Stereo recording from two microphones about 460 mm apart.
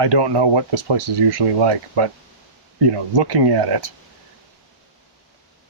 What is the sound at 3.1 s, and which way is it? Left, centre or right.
Speech, right.